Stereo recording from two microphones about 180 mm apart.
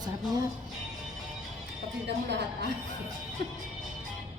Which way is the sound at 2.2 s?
70° right (ahead or behind).